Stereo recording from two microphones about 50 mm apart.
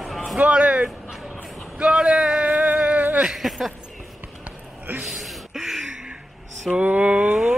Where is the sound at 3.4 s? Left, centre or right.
Centre.